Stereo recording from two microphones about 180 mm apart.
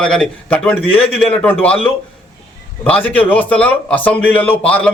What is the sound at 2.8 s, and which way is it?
A man's voice, 5° left (ahead or behind).